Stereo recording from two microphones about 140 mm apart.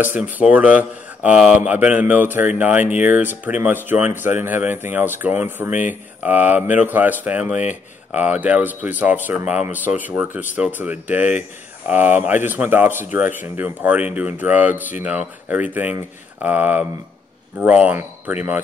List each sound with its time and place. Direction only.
0.2 s speech: 10° right (ahead or behind)
5.7 s speech: 65° left (ahead or behind)
6.2 s speech: 10° right (ahead or behind)
14.7 s speech: 65° left (ahead or behind)
15.0 s speech: 10° right (ahead or behind)